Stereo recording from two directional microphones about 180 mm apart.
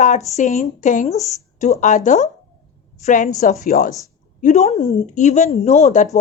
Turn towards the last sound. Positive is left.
turn(degrees=40)  # may be behind; listen again after turning